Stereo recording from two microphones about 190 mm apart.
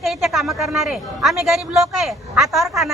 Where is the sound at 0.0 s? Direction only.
Centre (ahead or behind).